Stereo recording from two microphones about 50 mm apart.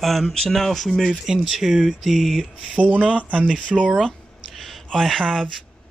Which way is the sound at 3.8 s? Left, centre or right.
Centre.